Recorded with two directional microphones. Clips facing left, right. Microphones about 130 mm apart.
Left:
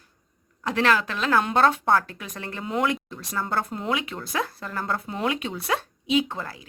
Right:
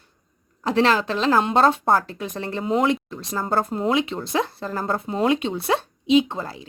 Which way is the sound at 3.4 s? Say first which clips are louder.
Right 5 dB; 40° right (ahead or behind).